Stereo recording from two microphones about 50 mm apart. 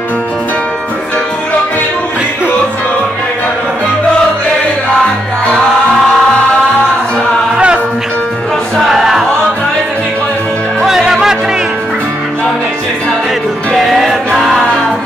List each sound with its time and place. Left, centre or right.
7.5 s music: right
8.9 s choir: centre
10.9 s music: centre
13.7 s music: centre